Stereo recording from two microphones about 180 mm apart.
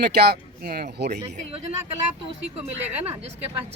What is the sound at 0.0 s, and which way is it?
Speech, 65° right (ahead or behind).